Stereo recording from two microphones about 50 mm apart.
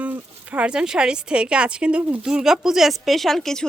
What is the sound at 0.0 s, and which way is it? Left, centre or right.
Speech, right.